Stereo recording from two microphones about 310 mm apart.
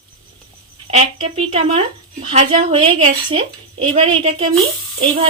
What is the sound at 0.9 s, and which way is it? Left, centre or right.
A woman's voice, centre.